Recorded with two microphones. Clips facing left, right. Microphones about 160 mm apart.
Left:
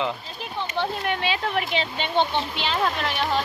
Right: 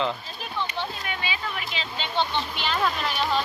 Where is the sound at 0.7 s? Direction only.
65° left (ahead or behind).